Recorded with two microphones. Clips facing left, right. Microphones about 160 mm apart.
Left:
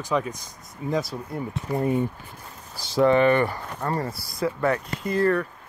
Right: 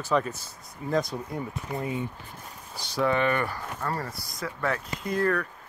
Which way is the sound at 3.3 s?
20° left (ahead or behind).